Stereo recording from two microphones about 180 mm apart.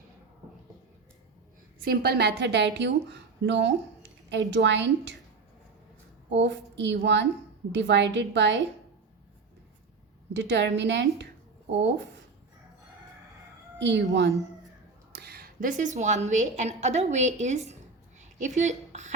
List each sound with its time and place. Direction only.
1.8 s a woman's voice: 60° right (ahead or behind); by 5.1 s 75° right (ahead or behind)
6.3 s a woman's voice: 80° right
10.3 s a woman's voice: 80° right
13.7 s a woman's voice: 80° right
15.1 s a woman's voice: 60° right (ahead or behind); by 19.1 s 40° right (ahead or behind)